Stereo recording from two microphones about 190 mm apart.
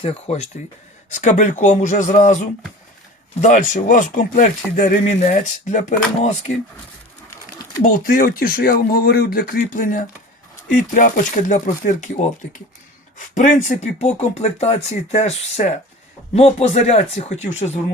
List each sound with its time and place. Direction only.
0.0 s speech: 35° left (ahead or behind)
8.0 s speech: 50° left (ahead or behind)